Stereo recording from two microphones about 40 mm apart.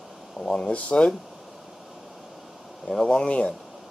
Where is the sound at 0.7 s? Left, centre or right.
Left.